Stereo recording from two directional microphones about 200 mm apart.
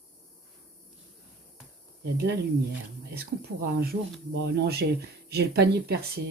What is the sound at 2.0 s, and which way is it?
Speech, 55° right (ahead or behind).